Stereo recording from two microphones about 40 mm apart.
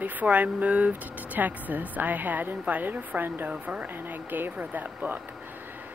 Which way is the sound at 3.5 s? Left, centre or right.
Right.